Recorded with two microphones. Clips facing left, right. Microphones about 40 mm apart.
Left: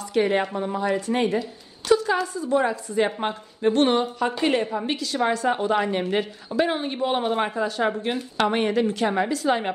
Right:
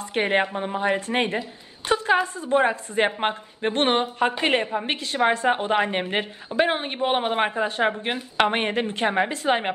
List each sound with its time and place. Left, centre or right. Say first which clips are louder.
0.0 s a woman's voice: even; right
1.9 s a sound: left 1 dB; right
2.2 s a woman's voice: right 1 dB; right